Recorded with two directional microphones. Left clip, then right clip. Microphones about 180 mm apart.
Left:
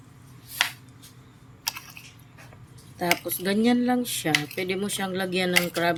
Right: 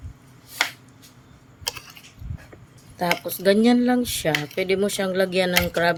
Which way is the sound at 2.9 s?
40° right (ahead or behind).